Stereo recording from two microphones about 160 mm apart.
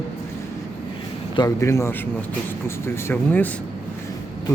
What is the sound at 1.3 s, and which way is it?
A man's voice, 20° left (ahead or behind).